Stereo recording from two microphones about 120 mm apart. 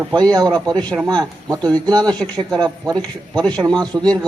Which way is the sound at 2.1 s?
5° left (ahead or behind).